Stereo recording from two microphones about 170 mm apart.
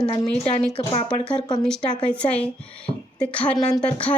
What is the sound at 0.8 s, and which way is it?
Speech, 30° left (ahead or behind).